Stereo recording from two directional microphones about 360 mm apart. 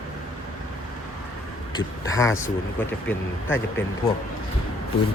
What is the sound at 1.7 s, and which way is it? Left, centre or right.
Speech, centre.